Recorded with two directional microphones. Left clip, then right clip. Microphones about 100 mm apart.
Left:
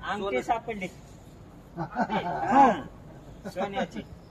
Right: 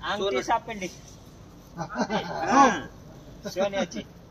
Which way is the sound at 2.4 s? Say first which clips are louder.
Right 1 dB; 15° left (ahead or behind).